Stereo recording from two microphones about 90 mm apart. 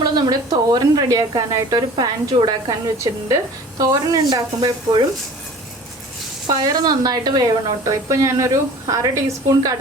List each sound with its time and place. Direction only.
0.0 s speech: 45° right (ahead or behind)
6.5 s speech: 45° right (ahead or behind)